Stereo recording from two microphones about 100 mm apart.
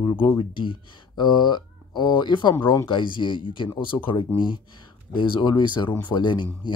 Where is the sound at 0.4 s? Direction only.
55° left (ahead or behind).